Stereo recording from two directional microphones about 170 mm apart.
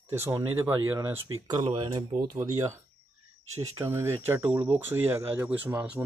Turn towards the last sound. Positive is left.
turn(degrees=-10)  # may be behind; listen again after turning